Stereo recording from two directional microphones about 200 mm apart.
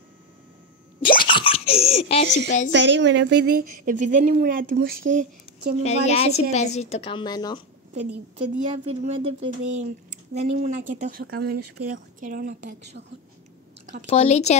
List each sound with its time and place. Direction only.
1.0 s baby laughter: 25° left (ahead or behind)
2.7 s speech: 60° right (ahead or behind); by 5.8 s 45° right (ahead or behind)
5.8 s a woman's voice: 35° left (ahead or behind)
8.4 s speech: 30° right (ahead or behind)
14.0 s a woman's voice: 30° left (ahead or behind)